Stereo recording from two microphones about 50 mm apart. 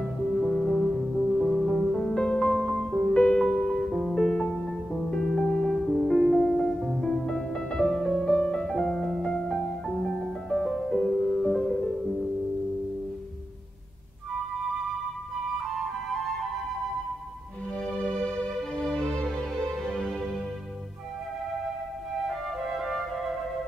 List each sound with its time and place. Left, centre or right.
0.3 s music: centre
1.7 s music: centre
3.4 s music: centre
18.8 s music: centre
22.3 s music: centre